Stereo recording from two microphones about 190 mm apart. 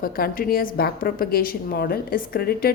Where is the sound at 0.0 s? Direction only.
50° left (ahead or behind).